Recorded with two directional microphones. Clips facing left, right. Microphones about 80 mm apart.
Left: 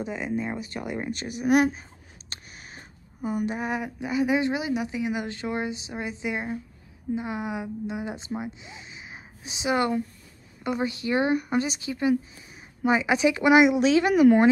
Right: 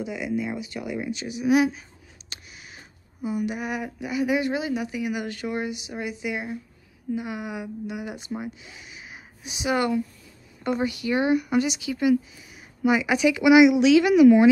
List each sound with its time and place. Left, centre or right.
0.0 s speech: left
2.2 s a sound: left
3.5 s a woman's voice: left